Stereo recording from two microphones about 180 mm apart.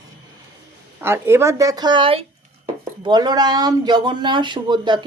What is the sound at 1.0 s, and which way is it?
Speech, 15° right (ahead or behind).